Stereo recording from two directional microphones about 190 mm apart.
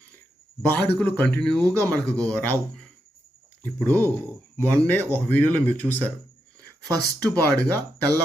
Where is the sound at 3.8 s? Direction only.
10° left (ahead or behind).